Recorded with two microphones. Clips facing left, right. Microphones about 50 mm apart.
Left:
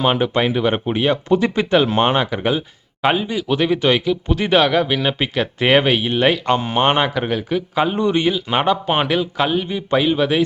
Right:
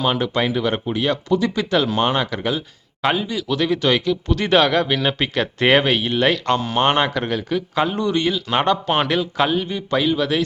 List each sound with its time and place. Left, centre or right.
0.0 s speech: left
7.9 s speech: left